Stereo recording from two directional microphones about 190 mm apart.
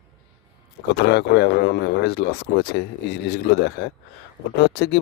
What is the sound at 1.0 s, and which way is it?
Speech, 60° left (ahead or behind).